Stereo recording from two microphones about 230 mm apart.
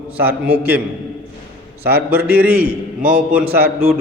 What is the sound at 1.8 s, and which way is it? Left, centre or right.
Speech, right.